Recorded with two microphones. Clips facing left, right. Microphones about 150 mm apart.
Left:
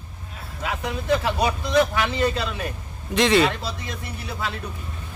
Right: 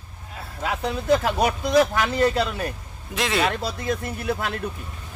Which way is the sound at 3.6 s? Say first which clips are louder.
Right 6 dB; 50° right (ahead or behind).